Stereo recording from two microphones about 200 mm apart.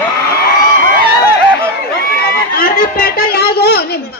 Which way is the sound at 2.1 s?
45° left (ahead or behind).